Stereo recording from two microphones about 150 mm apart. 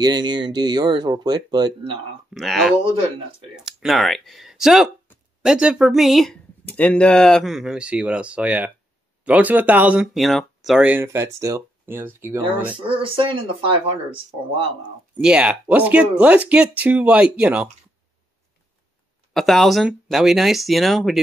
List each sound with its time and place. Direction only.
0.0 s speech: 30° right (ahead or behind)
2.3 s speech: centre (ahead or behind)
10.1 s speech: centre (ahead or behind)
12.8 s speech: 35° right (ahead or behind)
15.1 s speech: 5° right (ahead or behind)
19.3 s speech: centre (ahead or behind)